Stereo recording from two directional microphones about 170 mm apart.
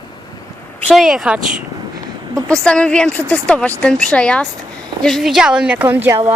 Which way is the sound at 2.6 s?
5° left (ahead or behind).